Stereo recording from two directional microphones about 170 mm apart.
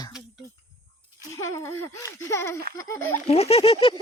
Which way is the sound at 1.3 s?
15° left (ahead or behind).